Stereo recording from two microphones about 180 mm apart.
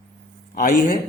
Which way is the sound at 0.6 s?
55° left (ahead or behind).